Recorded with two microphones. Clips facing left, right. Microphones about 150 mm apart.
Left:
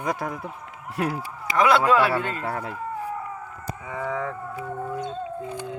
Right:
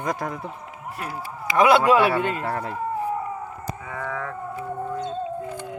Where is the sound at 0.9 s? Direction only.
80° left.